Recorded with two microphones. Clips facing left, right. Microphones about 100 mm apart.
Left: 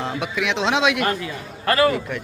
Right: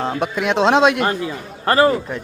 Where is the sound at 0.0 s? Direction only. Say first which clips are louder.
Right 4 dB; 45° right (ahead or behind).